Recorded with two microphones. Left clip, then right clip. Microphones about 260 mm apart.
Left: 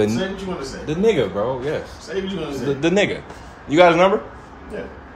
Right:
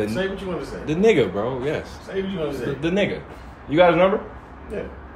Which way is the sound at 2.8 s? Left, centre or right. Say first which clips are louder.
Left 5 dB; left.